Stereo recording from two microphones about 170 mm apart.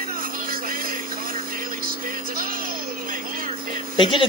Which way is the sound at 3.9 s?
30° left (ahead or behind).